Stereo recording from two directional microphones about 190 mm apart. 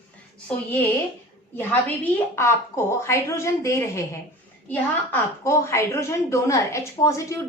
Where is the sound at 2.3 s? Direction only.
15° left (ahead or behind).